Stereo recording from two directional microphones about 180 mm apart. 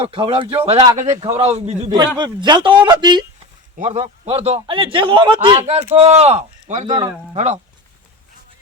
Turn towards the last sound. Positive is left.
turn(degrees=-25)  # may be behind; listen again after turning